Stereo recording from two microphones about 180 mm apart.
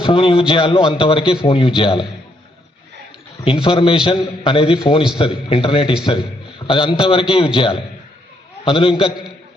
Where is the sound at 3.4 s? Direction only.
30° left (ahead or behind).